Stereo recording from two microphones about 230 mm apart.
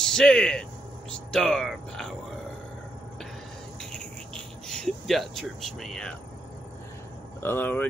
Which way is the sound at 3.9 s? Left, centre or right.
Centre.